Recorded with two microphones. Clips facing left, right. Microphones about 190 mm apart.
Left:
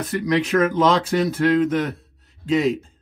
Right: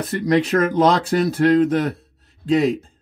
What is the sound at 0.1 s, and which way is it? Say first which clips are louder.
Speech: right 2 dB; 35° right (ahead or behind).